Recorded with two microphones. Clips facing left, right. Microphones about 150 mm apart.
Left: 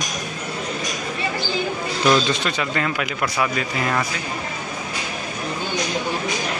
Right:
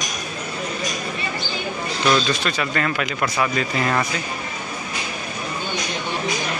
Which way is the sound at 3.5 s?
5° left (ahead or behind).